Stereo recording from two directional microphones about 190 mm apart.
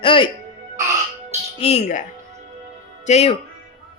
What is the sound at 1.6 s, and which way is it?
Speech, 35° left (ahead or behind).